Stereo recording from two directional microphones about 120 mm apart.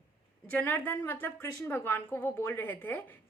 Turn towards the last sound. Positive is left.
turn(degrees=15)  # may be behind; listen again after turning